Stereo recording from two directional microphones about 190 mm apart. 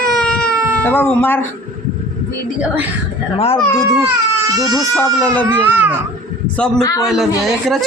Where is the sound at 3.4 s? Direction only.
30° left (ahead or behind).